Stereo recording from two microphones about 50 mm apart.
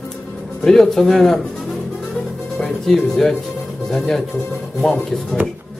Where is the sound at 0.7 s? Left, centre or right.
Centre.